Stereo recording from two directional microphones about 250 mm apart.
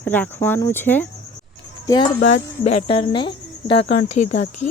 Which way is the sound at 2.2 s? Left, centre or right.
Left.